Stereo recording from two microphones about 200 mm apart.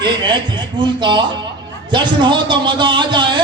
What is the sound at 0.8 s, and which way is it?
A man's voice, 20° right (ahead or behind).